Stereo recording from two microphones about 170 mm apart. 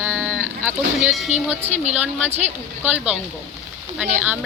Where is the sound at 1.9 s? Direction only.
5° right (ahead or behind).